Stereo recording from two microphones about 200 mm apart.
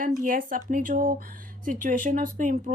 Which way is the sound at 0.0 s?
45° right (ahead or behind).